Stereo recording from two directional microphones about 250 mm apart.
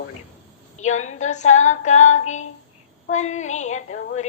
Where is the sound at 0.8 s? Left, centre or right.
Left.